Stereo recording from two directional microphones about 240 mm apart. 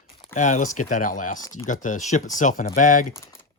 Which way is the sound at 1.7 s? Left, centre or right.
Left.